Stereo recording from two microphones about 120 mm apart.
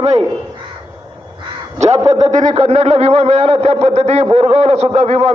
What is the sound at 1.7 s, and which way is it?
Speech, 65° right (ahead or behind).